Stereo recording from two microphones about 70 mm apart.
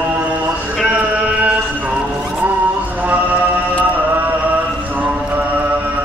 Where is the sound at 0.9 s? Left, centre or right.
Centre.